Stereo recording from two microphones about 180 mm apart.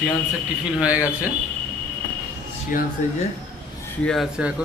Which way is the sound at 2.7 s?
50° left (ahead or behind).